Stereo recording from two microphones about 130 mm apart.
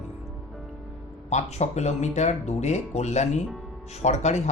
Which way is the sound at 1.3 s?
60° left (ahead or behind).